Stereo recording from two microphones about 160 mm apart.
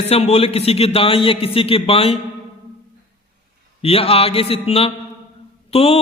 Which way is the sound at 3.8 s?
40° left (ahead or behind).